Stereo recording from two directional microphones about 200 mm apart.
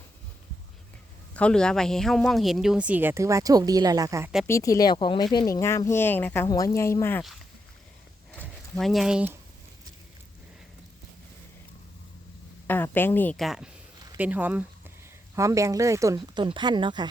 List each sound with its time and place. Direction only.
1.3 s speech: 5° left (ahead or behind); by 4.3 s 15° right (ahead or behind)
4.4 s speech: 15° left (ahead or behind)
8.4 s a sound: 5° left (ahead or behind)
12.6 s speech: 10° left (ahead or behind); by 17.1 s 20° right (ahead or behind)